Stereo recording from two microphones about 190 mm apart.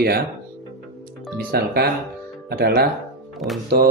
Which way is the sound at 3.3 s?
Centre (ahead or behind).